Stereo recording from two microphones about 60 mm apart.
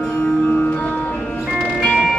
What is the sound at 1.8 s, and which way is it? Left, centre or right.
Music, centre.